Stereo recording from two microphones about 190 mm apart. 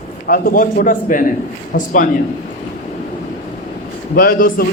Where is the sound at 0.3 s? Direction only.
50° left (ahead or behind).